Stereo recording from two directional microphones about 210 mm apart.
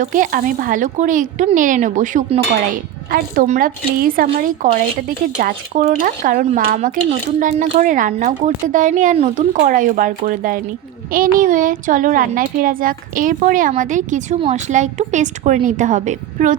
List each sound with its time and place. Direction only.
0.0 s speech: 40° right (ahead or behind)